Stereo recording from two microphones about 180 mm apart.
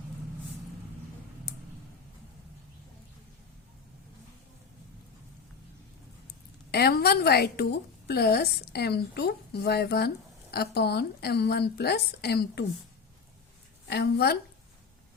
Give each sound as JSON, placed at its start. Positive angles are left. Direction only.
{"t": 6.7, "sound": "a woman's voice", "side_deg": 60}
{"t": 13.9, "sound": "a woman's voice", "side_deg": 65}